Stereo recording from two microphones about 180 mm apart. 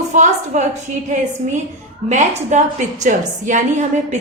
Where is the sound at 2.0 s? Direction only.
40° right (ahead or behind).